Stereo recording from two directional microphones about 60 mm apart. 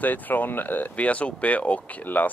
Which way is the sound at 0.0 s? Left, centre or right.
Left.